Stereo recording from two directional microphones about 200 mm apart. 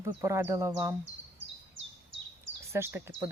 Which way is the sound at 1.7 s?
65° right (ahead or behind).